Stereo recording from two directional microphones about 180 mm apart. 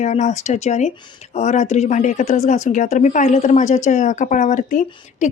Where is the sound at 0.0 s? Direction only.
40° left (ahead or behind).